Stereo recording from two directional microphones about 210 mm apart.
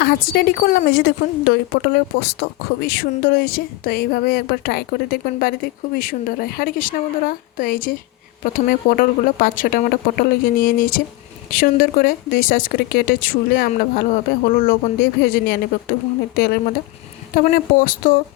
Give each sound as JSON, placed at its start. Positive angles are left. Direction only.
{"t": 0.3, "sound": "a woman's voice", "side_deg": 45}